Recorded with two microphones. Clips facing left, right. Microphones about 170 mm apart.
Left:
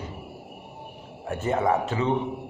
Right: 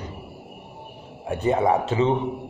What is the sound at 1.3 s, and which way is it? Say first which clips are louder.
Speech: right 3 dB; 15° right (ahead or behind).